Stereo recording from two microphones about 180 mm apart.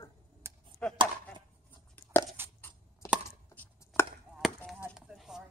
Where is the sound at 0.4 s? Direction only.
15° right (ahead or behind).